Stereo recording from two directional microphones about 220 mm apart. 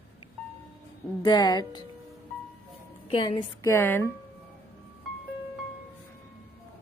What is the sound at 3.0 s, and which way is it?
Speech, 25° left (ahead or behind).